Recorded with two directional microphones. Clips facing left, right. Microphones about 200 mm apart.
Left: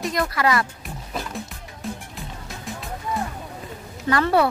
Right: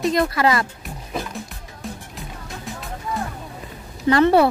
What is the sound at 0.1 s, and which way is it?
Speech, 25° right (ahead or behind).